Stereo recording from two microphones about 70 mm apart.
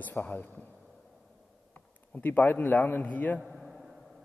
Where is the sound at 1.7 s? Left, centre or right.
Left.